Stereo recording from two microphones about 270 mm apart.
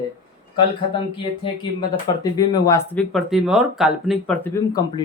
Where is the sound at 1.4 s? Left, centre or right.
Centre.